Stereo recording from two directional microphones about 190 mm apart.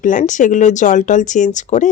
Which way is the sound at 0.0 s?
40° left (ahead or behind).